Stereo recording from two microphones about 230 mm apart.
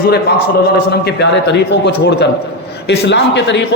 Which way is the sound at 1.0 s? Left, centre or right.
Left.